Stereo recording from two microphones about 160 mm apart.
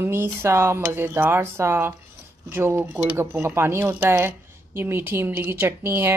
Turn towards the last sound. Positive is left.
turn(degrees=-15)  # may be behind; listen again after turning